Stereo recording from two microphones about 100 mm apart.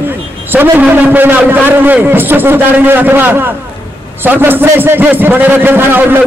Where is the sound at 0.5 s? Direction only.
20° right (ahead or behind).